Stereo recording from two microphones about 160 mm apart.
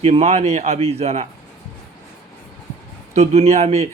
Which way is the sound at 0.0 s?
40° right (ahead or behind).